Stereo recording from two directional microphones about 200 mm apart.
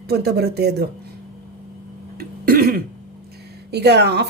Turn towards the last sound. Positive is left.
turn(degrees=-55)  # may be behind; listen again after turning